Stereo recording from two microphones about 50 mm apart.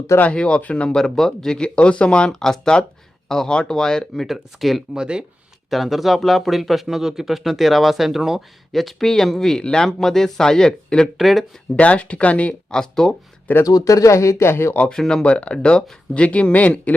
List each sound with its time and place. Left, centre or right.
0.2 s speech: left
0.9 s speech: centre
2.3 s speech: centre
4.9 s speech: centre
5.7 s speech: centre
11.2 s speech: centre
11.8 s speech: left
12.7 s speech: centre
13.5 s speech: left
13.8 s speech: left
14.8 s speech: centre
15.2 s speech: left